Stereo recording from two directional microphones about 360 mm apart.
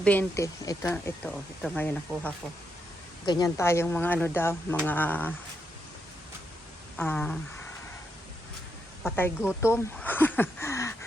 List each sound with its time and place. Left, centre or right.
0.0 s speech: centre
6.9 s speech: centre
9.0 s speech: centre